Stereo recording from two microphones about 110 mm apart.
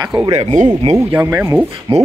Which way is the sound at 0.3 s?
85° right.